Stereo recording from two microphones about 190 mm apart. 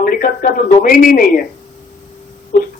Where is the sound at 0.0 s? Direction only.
50° left (ahead or behind).